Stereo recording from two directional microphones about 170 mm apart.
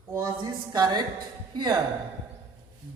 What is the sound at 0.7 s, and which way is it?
Speech, 25° right (ahead or behind).